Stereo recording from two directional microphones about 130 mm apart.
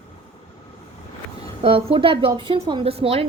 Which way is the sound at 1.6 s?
45° right (ahead or behind).